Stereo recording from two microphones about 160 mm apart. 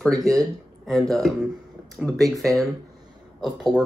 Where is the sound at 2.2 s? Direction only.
Centre (ahead or behind).